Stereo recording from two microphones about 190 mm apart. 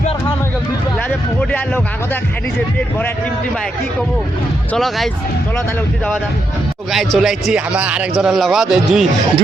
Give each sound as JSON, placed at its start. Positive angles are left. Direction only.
{"t": 1.4, "sound": "a man's voice", "side_deg": 10}
{"t": 4.7, "sound": "a man's voice", "side_deg": 0}
{"t": 6.9, "sound": "a man's voice", "side_deg": 0}